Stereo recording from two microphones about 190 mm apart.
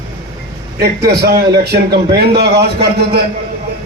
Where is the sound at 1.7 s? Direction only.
55° right (ahead or behind).